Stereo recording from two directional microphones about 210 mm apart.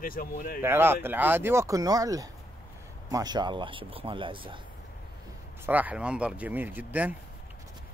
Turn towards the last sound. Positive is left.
turn(degrees=-10)  # may be behind; listen again after turning